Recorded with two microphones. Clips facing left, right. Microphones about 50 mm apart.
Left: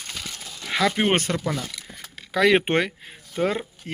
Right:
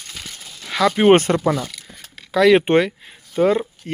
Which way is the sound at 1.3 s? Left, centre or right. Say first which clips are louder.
Right 8 dB; right.